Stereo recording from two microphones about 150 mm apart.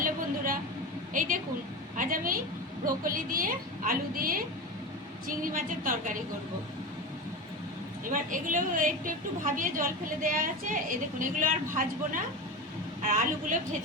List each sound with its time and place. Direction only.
0.0 s a sound: 65° right (ahead or behind)
1.1 s a woman's voice: 65° right (ahead or behind)
8.1 s a woman's voice: 65° right (ahead or behind)